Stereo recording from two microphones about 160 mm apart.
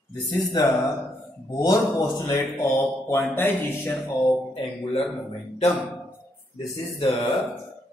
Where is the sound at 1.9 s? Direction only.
15° left (ahead or behind).